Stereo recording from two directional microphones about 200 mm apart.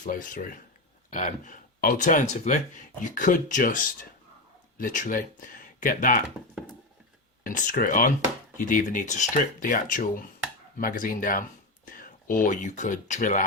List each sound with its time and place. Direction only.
0.0 s speech: 40° left (ahead or behind)
7.4 s speech: 40° left (ahead or behind)